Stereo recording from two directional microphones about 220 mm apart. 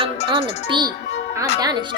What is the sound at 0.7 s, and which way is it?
Speech, 20° right (ahead or behind).